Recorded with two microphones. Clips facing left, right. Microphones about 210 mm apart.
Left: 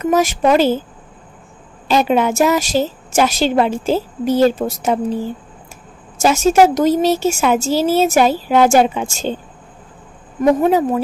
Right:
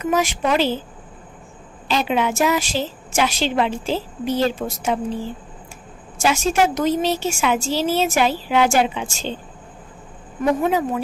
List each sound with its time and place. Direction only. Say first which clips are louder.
0.0 s a woman's voice: left 6 dB; 40° left (ahead or behind)
1.9 s a woman's voice: left 6 dB; 45° left (ahead or behind)
10.4 s speech: left 6 dB; 40° left (ahead or behind)